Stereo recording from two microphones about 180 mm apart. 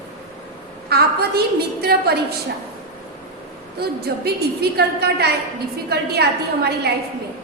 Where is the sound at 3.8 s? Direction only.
60° right (ahead or behind).